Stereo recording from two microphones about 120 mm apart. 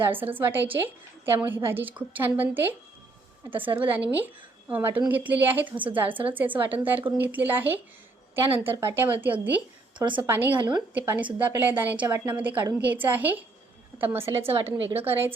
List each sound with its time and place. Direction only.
0.0 s a woman's voice: 15° right (ahead or behind)